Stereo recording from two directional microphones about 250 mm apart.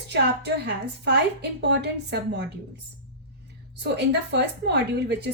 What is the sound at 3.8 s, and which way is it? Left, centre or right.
A woman's voice, right.